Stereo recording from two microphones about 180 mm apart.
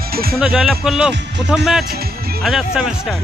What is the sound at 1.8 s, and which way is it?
Music, 60° right (ahead or behind).